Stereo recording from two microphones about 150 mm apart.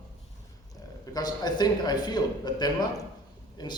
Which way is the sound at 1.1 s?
25° left (ahead or behind).